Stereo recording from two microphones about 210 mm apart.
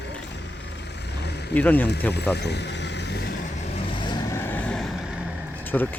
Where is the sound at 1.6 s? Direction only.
10° left (ahead or behind).